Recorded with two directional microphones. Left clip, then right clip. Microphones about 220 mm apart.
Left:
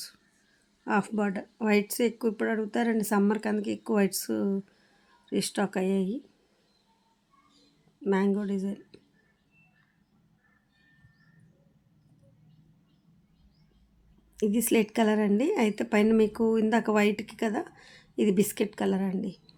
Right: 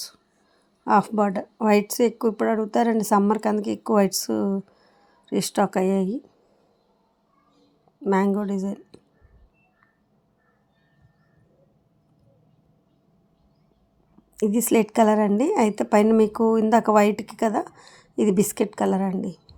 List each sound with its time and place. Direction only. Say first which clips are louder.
0.9 s a woman's voice: right 9 dB; 15° right (ahead or behind)
8.0 s a woman's voice: right 5 dB; 20° right (ahead or behind)
14.3 s a woman's voice: right 5 dB; 20° right (ahead or behind)